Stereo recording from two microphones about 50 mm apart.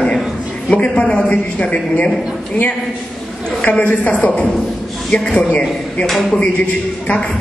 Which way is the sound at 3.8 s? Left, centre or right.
Left.